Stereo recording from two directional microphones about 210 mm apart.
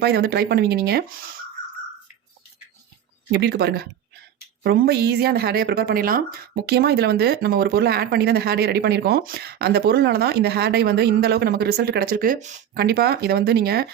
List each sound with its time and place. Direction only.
0.0 s a woman's voice: 50° right (ahead or behind)
3.3 s a woman's voice: 50° right (ahead or behind)
12.8 s a woman's voice: 50° right (ahead or behind)